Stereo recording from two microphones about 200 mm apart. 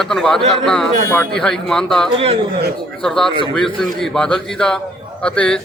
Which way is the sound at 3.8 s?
Centre (ahead or behind).